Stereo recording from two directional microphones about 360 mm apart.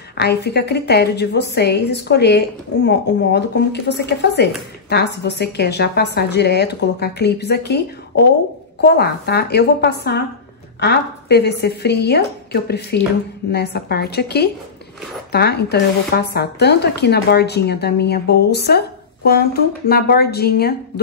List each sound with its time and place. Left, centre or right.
0.2 s a woman's voice: left